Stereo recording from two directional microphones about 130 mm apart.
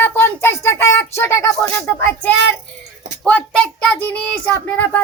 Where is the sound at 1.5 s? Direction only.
10° left (ahead or behind).